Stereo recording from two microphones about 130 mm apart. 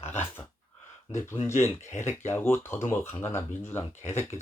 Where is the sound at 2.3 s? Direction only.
15° left (ahead or behind).